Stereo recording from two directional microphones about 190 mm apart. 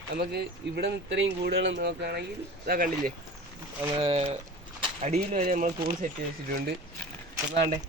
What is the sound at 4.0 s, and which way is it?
Speech, 35° right (ahead or behind).